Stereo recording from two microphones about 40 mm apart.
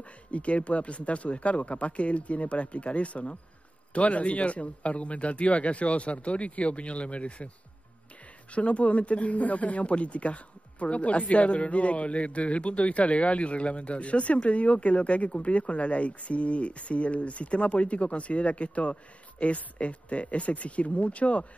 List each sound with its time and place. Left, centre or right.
0.3 s speech: left
8.5 s speech: left